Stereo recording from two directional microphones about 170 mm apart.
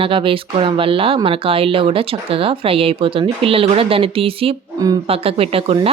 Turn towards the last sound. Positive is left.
turn(degrees=-35)  # may be behind; listen again after turning